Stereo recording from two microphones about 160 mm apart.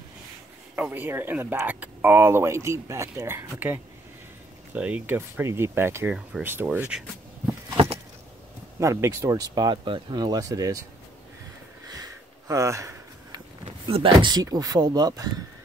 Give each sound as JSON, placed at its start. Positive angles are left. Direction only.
{"t": 0.7, "sound": "speech", "side_deg": -10}
{"t": 7.7, "sound": "a sound", "side_deg": -40}
{"t": 8.7, "sound": "speech", "side_deg": -20}
{"t": 11.9, "sound": "sniff", "side_deg": -20}
{"t": 13.7, "sound": "speech", "side_deg": -35}